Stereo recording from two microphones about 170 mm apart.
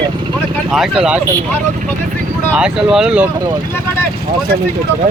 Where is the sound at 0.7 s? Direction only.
Centre (ahead or behind).